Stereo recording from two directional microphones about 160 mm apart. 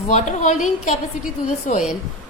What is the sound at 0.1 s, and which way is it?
Speech, 50° left (ahead or behind).